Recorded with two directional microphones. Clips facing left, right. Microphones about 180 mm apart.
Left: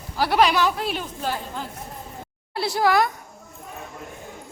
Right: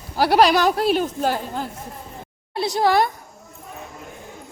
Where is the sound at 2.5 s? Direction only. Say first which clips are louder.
Right 2 dB; 20° right (ahead or behind).